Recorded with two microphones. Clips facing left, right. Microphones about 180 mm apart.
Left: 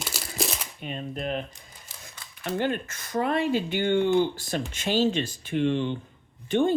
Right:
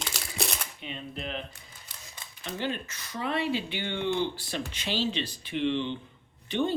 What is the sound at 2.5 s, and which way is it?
Speech, 50° left (ahead or behind).